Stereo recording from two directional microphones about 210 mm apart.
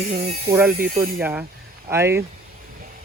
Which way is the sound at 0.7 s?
40° right (ahead or behind).